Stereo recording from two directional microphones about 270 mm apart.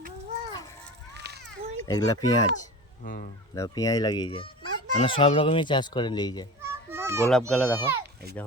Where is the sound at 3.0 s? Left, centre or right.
Left.